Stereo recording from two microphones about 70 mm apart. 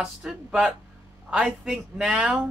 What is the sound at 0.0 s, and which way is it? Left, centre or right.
A woman's voice, centre.